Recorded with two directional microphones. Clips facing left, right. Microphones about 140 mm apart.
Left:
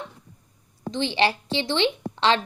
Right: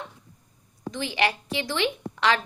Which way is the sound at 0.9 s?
30° left (ahead or behind).